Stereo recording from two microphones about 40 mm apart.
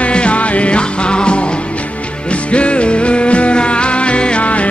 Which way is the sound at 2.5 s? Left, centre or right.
Left.